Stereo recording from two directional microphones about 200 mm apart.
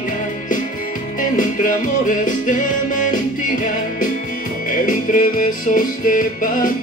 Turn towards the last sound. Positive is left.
turn(degrees=45)  # may be behind; listen again after turning